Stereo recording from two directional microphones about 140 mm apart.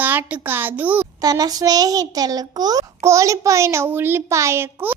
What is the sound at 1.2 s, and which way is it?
A child's voice, 25° right (ahead or behind).